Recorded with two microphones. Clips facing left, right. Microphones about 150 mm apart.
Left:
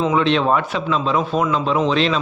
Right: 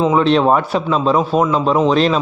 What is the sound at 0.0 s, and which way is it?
A man's voice, 35° right (ahead or behind).